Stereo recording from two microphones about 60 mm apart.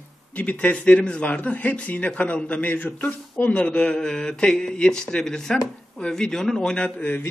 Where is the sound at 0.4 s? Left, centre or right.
Left.